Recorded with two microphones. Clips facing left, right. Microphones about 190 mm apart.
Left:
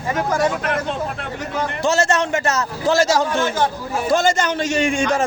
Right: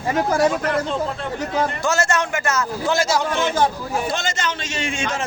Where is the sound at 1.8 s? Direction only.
35° left (ahead or behind); by 5.2 s 50° left (ahead or behind).